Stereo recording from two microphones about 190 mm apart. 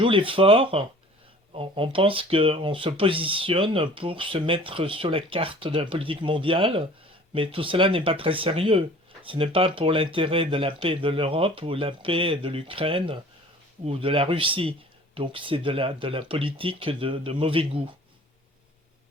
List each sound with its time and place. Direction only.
0.0 s speech: 25° right (ahead or behind)